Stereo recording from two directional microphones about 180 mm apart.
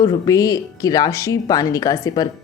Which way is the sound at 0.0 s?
20° left (ahead or behind).